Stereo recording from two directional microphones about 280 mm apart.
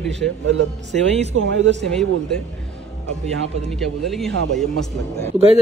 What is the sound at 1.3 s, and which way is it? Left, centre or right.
Speech, right.